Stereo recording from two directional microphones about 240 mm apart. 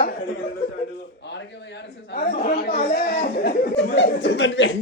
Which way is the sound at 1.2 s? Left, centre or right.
Left.